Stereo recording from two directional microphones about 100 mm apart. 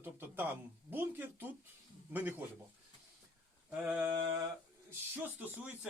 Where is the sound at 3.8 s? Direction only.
20° right (ahead or behind).